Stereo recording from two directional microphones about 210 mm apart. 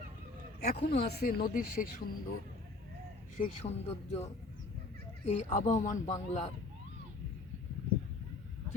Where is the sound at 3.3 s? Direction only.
35° left (ahead or behind).